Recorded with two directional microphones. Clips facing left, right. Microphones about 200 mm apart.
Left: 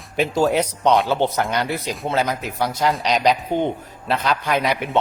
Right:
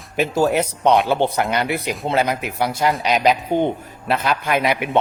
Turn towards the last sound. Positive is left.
turn(degrees=-5)  # may be behind; listen again after turning